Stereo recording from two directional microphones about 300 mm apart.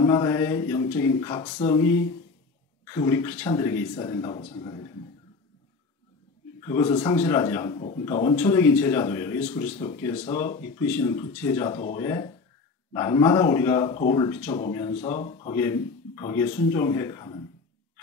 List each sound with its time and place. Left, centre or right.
0.0 s speech: centre
6.6 s speech: centre
9.7 s speech: left
9.9 s speech: centre